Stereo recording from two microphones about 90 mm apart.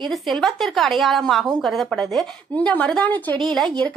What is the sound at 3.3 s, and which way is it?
Speech, 5° left (ahead or behind).